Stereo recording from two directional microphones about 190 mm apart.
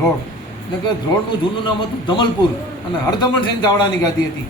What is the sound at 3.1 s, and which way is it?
Speech, 20° left (ahead or behind).